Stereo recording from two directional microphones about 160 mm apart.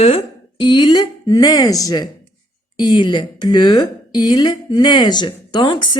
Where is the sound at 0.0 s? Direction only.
40° left (ahead or behind).